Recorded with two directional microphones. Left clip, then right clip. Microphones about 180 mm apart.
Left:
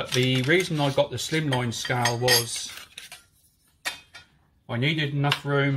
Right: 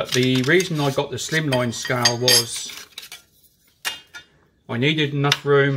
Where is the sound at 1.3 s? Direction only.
35° left (ahead or behind).